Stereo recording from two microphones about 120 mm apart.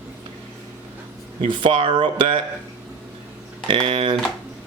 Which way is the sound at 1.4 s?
45° right (ahead or behind).